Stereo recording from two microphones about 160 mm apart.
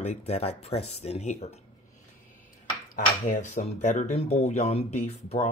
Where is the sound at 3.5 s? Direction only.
50° left (ahead or behind).